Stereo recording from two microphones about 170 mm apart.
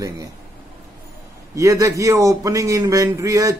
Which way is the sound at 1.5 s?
20° right (ahead or behind).